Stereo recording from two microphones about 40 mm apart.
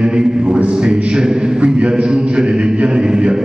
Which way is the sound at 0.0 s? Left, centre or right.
Right.